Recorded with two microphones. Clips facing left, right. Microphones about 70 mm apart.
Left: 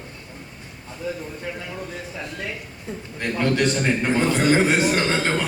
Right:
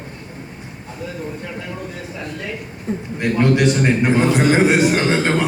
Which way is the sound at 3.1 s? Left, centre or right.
Centre.